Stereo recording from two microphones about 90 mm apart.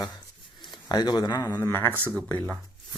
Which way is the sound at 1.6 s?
25° left (ahead or behind).